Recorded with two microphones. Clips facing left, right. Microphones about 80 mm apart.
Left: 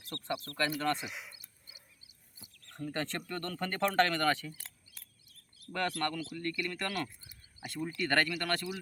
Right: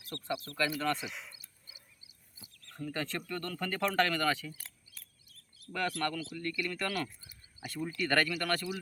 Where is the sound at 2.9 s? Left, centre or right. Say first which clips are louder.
Even; left.